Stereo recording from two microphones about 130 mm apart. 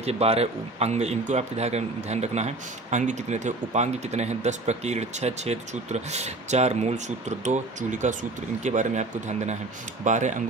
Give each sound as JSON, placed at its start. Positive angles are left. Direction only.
{"t": 0.0, "sound": "speech", "side_deg": -50}